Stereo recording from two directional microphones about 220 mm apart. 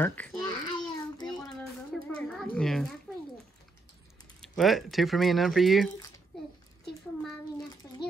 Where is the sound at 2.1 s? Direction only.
5° left (ahead or behind).